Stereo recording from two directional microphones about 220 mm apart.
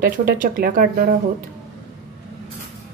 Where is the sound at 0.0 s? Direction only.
40° right (ahead or behind).